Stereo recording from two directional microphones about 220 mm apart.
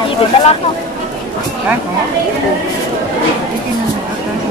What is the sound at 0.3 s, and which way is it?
Speech, 25° left (ahead or behind).